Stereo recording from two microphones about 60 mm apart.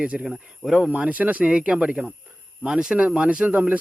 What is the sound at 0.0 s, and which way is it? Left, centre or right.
Speech, centre.